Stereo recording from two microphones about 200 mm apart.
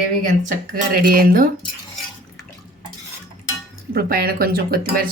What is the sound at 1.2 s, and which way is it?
Speech, 45° right (ahead or behind).